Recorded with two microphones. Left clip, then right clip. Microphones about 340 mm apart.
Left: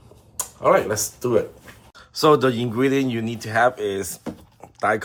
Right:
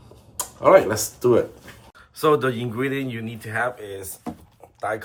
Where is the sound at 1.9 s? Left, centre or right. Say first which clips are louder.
Left 3 dB; centre.